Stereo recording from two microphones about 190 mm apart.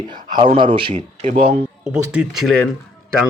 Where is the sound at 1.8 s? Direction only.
5° right (ahead or behind).